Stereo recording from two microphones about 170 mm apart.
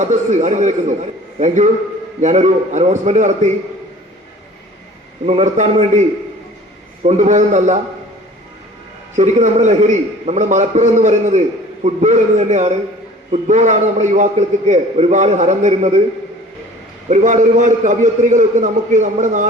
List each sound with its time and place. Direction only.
0.0 s a man's voice: 45° right (ahead or behind)
5.2 s a man's voice: 40° right (ahead or behind)
9.1 s a man's voice: 45° right (ahead or behind)
17.1 s a man's voice: 45° right (ahead or behind)